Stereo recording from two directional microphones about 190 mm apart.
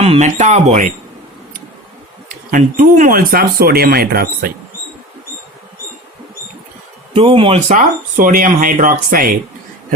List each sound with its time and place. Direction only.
0.0 s speech: 35° right (ahead or behind)
2.5 s speech: 45° right (ahead or behind)
7.1 s speech: 30° right (ahead or behind); by 9.3 s 45° right (ahead or behind)